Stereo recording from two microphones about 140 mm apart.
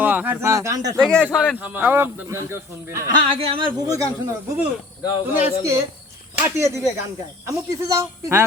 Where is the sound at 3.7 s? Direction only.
25° right (ahead or behind).